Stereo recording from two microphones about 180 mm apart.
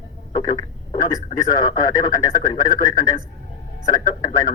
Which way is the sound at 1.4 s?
20° left (ahead or behind).